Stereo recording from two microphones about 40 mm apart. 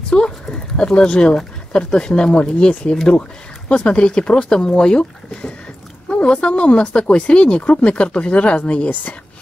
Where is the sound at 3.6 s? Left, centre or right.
Left.